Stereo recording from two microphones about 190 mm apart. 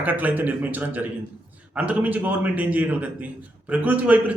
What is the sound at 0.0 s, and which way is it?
A man's voice, 10° right (ahead or behind).